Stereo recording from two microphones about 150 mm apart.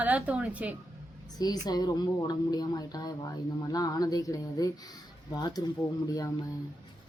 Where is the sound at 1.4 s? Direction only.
25° left (ahead or behind).